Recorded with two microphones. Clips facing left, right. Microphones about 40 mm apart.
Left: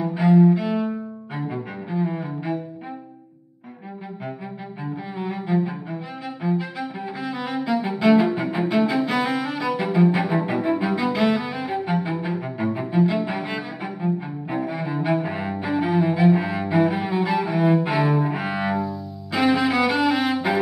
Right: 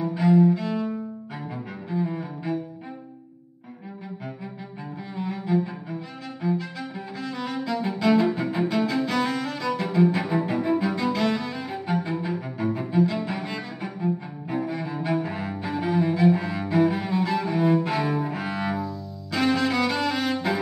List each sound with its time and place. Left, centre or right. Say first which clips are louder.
0.0 s cello: left 2 dB; centre
4.8 s cello: left 3 dB; centre
6.4 s music: left 2 dB; centre